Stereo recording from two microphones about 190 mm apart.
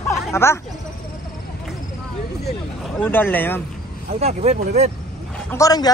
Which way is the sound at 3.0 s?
10° left (ahead or behind).